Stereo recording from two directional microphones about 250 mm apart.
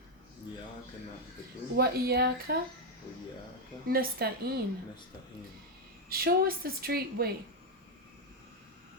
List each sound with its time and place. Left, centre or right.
1.7 s a woman's voice: right
3.8 s a woman's voice: right
6.1 s a woman's voice: right